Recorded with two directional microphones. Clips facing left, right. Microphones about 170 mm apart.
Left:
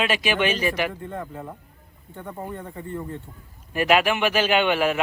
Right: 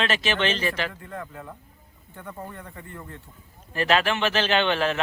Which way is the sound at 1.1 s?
25° left (ahead or behind).